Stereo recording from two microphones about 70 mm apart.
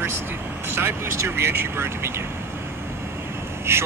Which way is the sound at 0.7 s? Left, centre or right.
Right.